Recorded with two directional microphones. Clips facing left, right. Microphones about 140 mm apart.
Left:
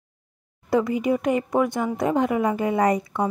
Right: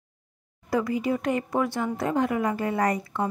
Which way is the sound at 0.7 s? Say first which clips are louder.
Left 4 dB; 20° left (ahead or behind).